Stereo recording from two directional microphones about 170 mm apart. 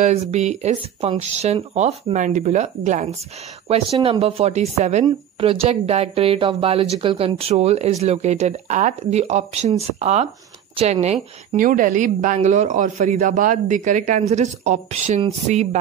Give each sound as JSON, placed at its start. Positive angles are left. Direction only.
{"t": 0.0, "sound": "a woman's voice", "side_deg": -40}